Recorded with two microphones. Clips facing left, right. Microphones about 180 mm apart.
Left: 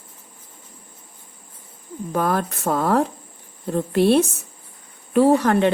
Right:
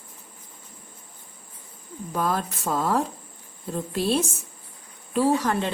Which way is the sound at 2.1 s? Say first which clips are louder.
Left 4 dB; 60° left (ahead or behind).